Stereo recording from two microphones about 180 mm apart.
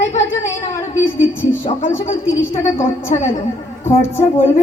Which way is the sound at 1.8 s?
40° left (ahead or behind).